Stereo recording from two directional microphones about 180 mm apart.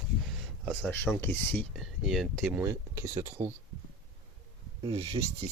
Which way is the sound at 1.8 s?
Centre (ahead or behind).